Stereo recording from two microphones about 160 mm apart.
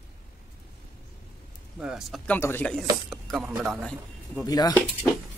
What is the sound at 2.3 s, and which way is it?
Speech, 10° left (ahead or behind).